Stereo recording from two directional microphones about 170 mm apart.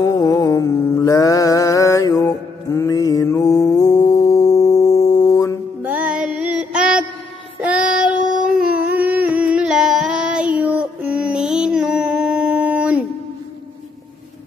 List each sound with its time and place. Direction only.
0.0 s music: 20° left (ahead or behind)
5.8 s music: 10° right (ahead or behind)
7.6 s child singing: 5° right (ahead or behind)
8.5 s humming: 10° right (ahead or behind)